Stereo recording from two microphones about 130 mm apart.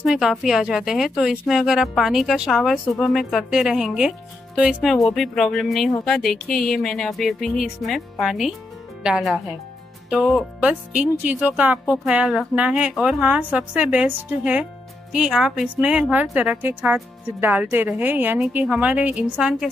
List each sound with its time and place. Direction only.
0.0 s a woman's voice: 5° right (ahead or behind)